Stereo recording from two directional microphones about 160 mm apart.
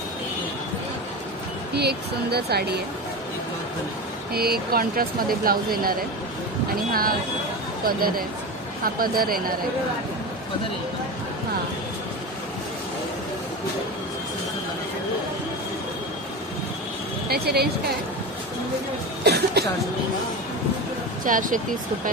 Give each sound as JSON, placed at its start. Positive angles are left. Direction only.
{"t": 1.8, "sound": "speech", "side_deg": -90}
{"t": 4.3, "sound": "speech", "side_deg": -75}
{"t": 17.3, "sound": "speech", "side_deg": -75}
{"t": 19.2, "sound": "cough", "side_deg": -90}
{"t": 21.2, "sound": "speech", "side_deg": -55}